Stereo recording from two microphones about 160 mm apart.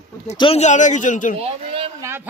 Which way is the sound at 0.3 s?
35° left (ahead or behind).